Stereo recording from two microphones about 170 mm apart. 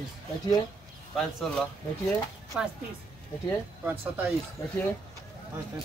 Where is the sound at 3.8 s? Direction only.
10° right (ahead or behind).